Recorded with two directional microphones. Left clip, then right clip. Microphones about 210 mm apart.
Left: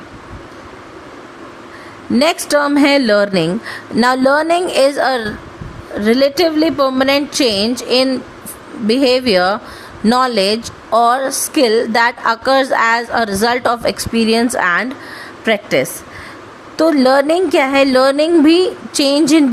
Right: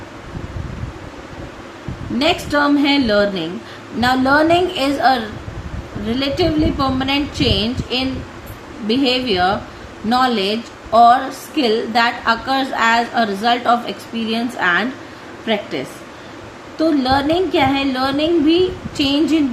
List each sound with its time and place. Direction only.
2.1 s a woman's voice: 55° left (ahead or behind)
16.7 s speech: 55° left (ahead or behind)